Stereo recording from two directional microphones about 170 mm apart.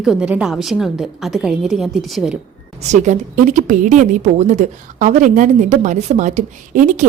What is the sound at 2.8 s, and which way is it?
A woman's voice, 45° right (ahead or behind).